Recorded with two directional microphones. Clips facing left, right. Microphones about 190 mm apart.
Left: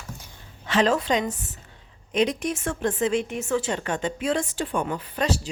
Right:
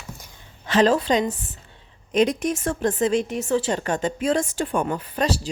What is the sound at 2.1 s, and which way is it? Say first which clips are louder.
A woman's voice: right 3 dB; 45° right (ahead or behind).